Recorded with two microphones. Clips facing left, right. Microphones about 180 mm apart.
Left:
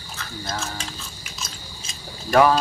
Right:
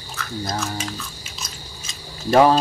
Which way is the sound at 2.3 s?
25° right (ahead or behind).